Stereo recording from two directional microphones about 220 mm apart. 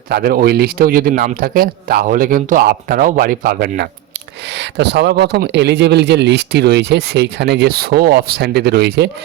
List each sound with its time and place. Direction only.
0.1 s speech: 45° right (ahead or behind)